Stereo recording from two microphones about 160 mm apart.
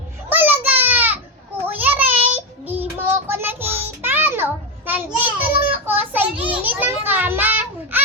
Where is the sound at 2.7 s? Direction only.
10° right (ahead or behind).